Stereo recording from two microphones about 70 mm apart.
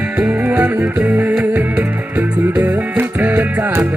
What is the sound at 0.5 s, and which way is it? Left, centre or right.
Music, centre.